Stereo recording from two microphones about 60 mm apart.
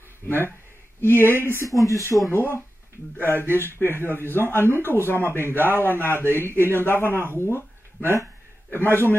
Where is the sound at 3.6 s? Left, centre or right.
Left.